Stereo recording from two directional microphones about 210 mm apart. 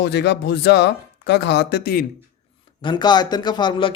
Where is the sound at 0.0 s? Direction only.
55° left (ahead or behind).